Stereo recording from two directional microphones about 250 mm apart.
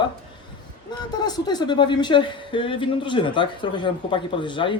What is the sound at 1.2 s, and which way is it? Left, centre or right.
A woman's voice, centre.